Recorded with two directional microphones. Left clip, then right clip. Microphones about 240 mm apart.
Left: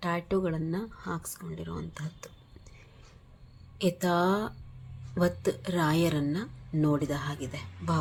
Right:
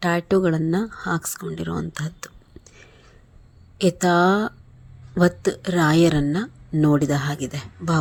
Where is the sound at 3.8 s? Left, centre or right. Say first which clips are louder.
Right 9 dB; right.